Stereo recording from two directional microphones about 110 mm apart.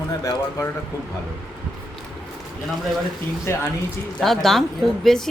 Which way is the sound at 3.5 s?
20° left (ahead or behind).